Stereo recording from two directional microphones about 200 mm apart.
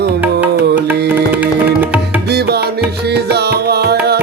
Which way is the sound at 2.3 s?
55° right (ahead or behind).